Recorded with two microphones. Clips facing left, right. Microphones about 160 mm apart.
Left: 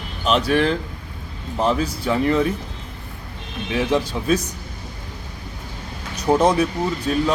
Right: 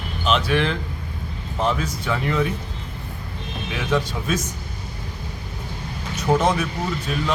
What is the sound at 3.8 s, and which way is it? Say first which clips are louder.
Speech: left 3 dB; 30° left (ahead or behind).